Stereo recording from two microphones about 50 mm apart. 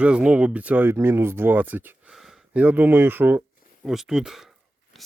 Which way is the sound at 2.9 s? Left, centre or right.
Right.